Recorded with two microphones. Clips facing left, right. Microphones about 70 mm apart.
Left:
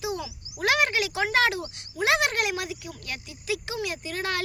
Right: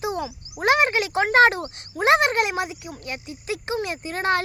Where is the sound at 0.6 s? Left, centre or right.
Right.